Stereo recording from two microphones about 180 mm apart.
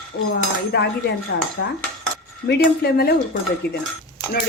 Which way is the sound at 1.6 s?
70° left (ahead or behind).